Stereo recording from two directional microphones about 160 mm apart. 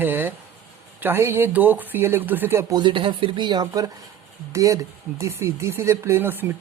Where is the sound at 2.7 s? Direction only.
30° right (ahead or behind); by 6.5 s 15° right (ahead or behind).